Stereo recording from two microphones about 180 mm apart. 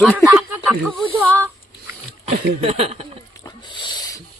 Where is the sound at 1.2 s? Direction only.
10° left (ahead or behind).